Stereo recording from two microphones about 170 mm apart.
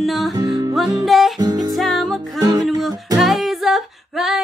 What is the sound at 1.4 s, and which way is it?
Music, 25° right (ahead or behind).